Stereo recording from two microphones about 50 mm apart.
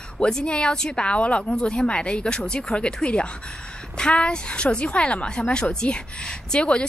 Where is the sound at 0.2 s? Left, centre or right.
Centre.